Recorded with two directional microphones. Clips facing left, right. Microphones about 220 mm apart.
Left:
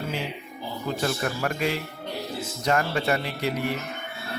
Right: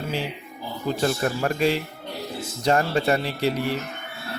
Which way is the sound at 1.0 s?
30° right (ahead or behind).